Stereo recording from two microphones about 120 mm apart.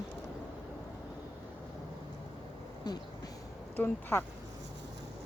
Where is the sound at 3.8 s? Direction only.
20° left (ahead or behind).